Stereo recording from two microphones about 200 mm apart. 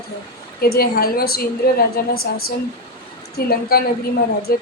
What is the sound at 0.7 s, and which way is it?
Speech, 50° left (ahead or behind).